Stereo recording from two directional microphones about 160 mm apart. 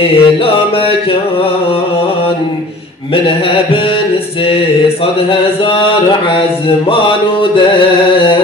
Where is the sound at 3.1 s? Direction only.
35° left (ahead or behind).